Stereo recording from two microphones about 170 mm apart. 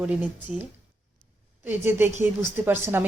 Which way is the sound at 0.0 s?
10° right (ahead or behind).